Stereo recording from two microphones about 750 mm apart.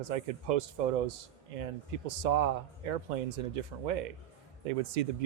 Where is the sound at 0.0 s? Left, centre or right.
Right.